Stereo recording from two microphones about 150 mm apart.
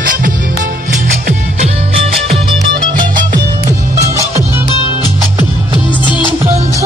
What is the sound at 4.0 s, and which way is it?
Music, 20° right (ahead or behind).